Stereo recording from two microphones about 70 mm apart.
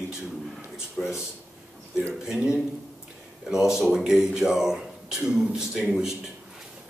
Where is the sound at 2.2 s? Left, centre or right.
Centre.